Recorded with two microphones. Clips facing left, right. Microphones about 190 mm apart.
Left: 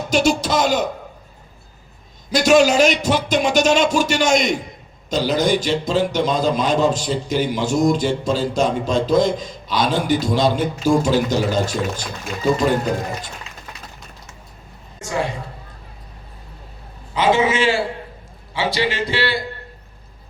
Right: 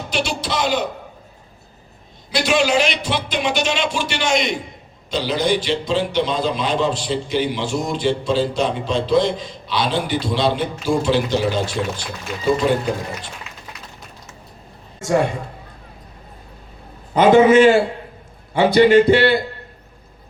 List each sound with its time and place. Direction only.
0.1 s a man's voice: 45° left (ahead or behind)
2.3 s a man's voice: 45° left (ahead or behind)
17.2 s speech: 55° right (ahead or behind)